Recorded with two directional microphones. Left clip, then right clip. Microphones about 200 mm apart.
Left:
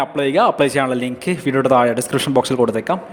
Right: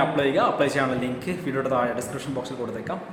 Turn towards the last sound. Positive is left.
turn(degrees=50)  # may be behind; listen again after turning